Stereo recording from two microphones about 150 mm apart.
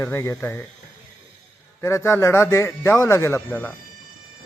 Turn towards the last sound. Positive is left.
turn(degrees=15)  # may be behind; listen again after turning